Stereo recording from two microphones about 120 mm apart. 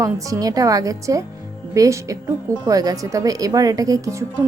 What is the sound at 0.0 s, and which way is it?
A woman's voice, 30° right (ahead or behind).